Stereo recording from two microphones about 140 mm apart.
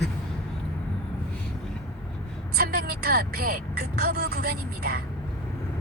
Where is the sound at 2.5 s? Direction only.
90° right.